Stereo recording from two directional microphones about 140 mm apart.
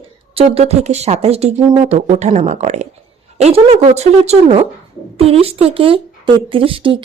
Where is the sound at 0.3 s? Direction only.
45° right (ahead or behind).